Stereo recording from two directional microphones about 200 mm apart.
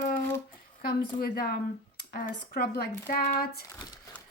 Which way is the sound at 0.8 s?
50° left (ahead or behind).